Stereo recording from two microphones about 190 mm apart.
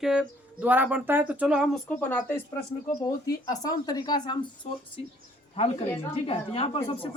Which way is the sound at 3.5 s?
20° left (ahead or behind).